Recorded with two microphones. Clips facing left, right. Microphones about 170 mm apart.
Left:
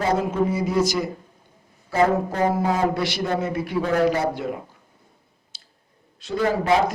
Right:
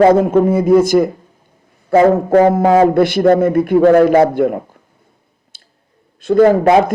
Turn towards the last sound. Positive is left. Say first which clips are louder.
# right 13 dB
turn(degrees=-55)  # may be behind; listen again after turning